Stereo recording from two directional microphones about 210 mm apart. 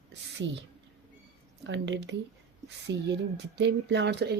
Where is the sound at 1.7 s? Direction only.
60° right (ahead or behind).